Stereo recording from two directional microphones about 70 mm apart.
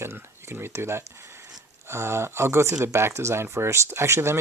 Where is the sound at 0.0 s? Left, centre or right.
Right.